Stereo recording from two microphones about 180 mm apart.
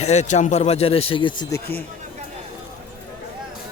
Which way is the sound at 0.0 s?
40° left (ahead or behind).